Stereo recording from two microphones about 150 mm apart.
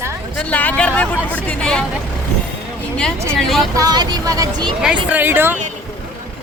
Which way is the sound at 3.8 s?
25° right (ahead or behind).